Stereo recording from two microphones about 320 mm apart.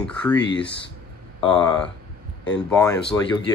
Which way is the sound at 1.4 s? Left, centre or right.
Centre.